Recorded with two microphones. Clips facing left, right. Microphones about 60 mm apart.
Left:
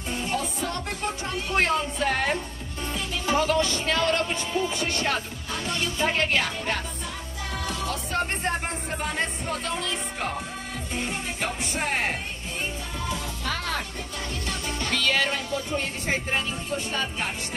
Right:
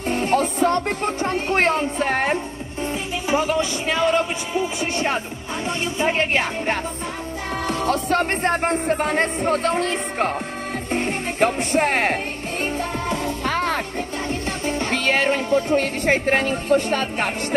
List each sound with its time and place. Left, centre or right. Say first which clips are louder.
0.1 s speech: right 9 dB; right
2.9 s a man's voice: right 3 dB; centre
5.7 s music: right 4 dB; right
7.6 s music: right 11 dB; right
14.7 s music: right 5 dB; right
15.7 s music: right 9 dB; right